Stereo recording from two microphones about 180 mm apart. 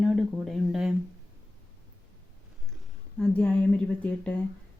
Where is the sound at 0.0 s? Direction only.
Centre (ahead or behind).